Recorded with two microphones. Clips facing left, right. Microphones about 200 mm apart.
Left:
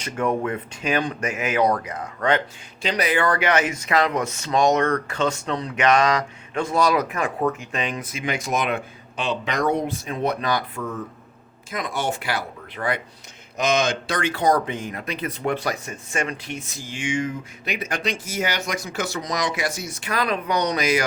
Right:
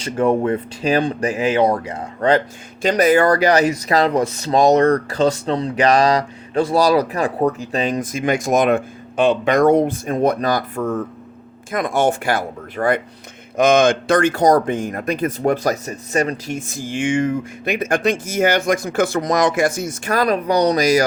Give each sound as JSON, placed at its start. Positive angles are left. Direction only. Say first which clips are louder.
{"t": 0.0, "sound": "speech", "louder": "right 6 dB", "side_deg": -30}
{"t": 2.8, "sound": "speech", "louder": "right 8 dB", "side_deg": -45}